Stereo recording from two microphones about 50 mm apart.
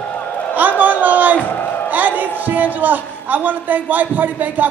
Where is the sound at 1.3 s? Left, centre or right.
Left.